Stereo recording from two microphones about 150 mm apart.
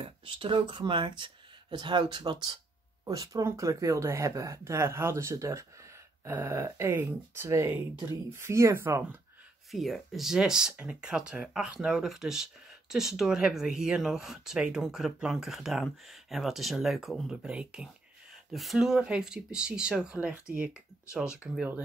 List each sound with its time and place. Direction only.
0.0 s speech: 35° right (ahead or behind); by 9.0 s 15° right (ahead or behind)
9.7 s speech: centre (ahead or behind)